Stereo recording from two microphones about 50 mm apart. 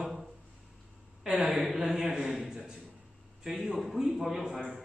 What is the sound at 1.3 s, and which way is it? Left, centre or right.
Speech, centre.